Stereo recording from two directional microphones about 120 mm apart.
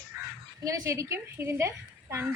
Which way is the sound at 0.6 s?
30° right (ahead or behind).